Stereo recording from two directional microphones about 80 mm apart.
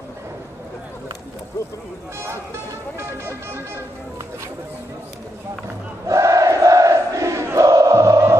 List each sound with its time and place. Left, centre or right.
3.3 s speech: right
6.0 s crowd: right